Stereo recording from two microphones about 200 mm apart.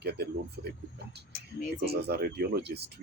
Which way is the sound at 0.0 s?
55° right (ahead or behind).